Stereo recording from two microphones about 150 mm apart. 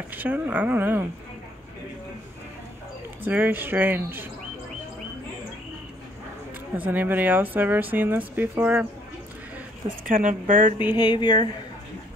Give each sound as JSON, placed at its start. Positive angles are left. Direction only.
{"t": 0.1, "sound": "speech", "side_deg": -10}
{"t": 3.3, "sound": "speech", "side_deg": -10}
{"t": 6.8, "sound": "speech", "side_deg": -10}
{"t": 10.0, "sound": "speech", "side_deg": -60}
{"t": 11.1, "sound": "speech", "side_deg": 30}